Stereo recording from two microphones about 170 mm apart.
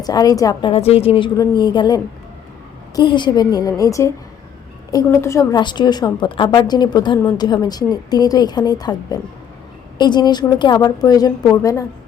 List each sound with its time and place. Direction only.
0.0 s a woman's voice: 20° left (ahead or behind)
0.7 s a woman's voice: 35° left (ahead or behind); by 11.9 s 20° left (ahead or behind)